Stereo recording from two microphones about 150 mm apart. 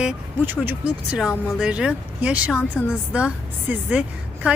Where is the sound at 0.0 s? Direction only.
10° right (ahead or behind).